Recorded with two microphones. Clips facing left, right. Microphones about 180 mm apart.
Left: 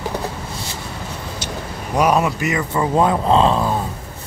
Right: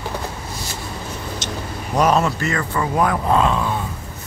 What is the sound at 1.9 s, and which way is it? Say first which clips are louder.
Speech: left 1 dB; 10° left (ahead or behind).